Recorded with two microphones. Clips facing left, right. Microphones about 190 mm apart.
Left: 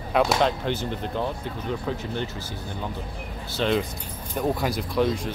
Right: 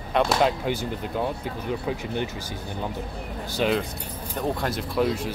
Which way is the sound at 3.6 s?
10° right (ahead or behind).